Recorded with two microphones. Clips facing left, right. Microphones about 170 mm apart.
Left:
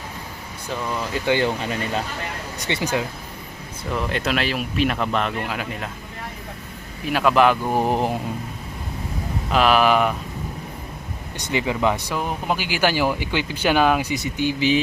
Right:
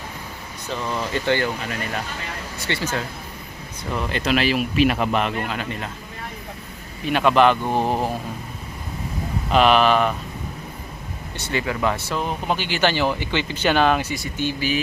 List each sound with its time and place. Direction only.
0.7 s speech: 5° left (ahead or behind)
1.6 s speech: 25° left (ahead or behind)
2.6 s speech: 15° left (ahead or behind)
3.9 s speech: centre (ahead or behind)
5.4 s speech: 5° left (ahead or behind)
7.0 s speech: 5° left (ahead or behind)
9.5 s speech: centre (ahead or behind)
11.3 s speech: 15° left (ahead or behind)